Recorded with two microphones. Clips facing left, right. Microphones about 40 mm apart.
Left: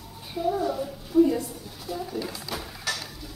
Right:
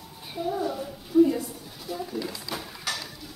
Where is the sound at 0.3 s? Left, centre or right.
Centre.